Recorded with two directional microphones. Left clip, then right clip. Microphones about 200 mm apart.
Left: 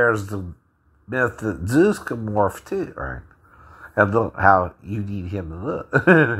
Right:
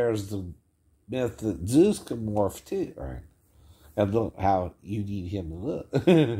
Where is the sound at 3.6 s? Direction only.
Centre (ahead or behind).